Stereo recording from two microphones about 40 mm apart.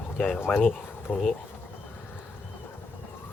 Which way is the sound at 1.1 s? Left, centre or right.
Left.